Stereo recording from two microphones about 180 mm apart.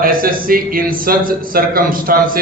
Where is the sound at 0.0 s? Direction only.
55° right (ahead or behind).